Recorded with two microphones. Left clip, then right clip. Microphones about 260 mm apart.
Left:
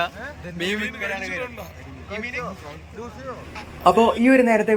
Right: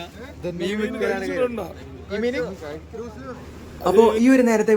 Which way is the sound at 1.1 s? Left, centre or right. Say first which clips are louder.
Right 2 dB; centre.